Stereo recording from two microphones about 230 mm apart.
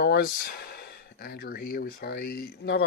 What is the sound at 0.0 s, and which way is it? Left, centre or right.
Speech, left.